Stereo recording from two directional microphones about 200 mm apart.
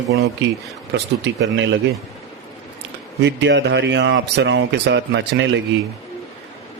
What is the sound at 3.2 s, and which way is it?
Speech, 60° right (ahead or behind).